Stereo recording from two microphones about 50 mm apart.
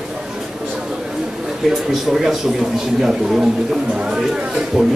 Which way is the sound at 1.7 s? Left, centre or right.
Centre.